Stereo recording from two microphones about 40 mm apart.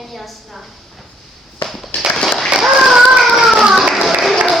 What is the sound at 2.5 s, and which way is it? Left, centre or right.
Child singing, centre.